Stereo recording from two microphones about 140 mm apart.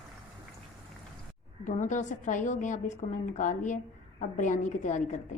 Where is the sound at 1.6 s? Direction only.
60° left (ahead or behind).